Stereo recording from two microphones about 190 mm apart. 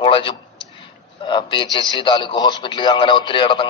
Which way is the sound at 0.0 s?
25° left (ahead or behind).